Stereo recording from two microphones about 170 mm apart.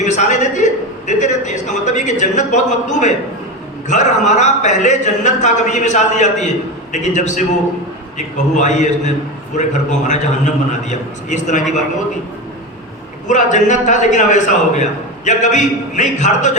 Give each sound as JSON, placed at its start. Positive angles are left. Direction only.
{"t": 0.0, "sound": "a sound", "side_deg": 45}
{"t": 3.8, "sound": "a man's voice", "side_deg": 45}
{"t": 8.5, "sound": "a man's voice", "side_deg": 45}
{"t": 13.2, "sound": "a man's voice", "side_deg": 45}